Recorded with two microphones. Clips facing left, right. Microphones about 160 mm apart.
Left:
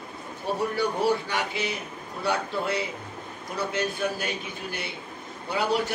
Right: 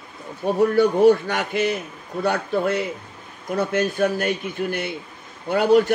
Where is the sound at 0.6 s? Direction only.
45° right (ahead or behind).